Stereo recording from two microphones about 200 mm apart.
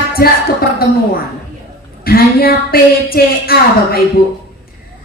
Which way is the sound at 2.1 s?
50° left (ahead or behind).